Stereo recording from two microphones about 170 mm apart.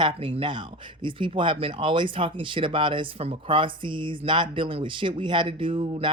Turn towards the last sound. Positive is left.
turn(degrees=-30)  # may be behind; listen again after turning